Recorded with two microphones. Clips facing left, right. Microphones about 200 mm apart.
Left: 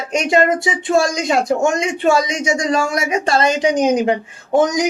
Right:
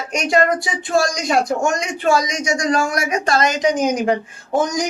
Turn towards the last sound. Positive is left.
turn(degrees=20)  # may be behind; listen again after turning